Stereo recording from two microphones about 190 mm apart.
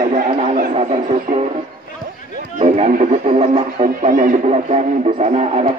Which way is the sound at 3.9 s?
45° right (ahead or behind).